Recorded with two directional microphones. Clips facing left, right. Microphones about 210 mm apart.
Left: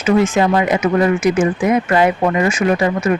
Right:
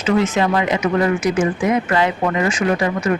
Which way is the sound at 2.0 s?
25° left (ahead or behind).